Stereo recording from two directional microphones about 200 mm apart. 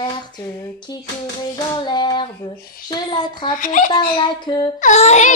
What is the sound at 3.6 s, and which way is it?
Music, 40° left (ahead or behind).